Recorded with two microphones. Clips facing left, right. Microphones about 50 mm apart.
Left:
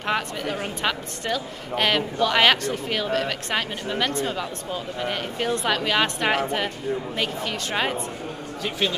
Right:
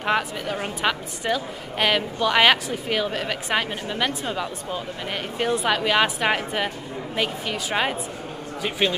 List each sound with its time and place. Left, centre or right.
0.0 s a woman's voice: centre
8.6 s a woman's voice: centre